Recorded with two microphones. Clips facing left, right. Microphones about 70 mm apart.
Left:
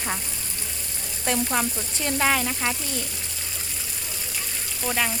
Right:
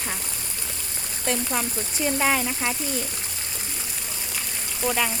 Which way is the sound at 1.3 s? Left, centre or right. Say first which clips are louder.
Left 2 dB; centre.